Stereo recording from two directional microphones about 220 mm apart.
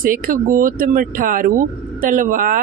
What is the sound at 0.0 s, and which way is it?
Speech, 40° right (ahead or behind).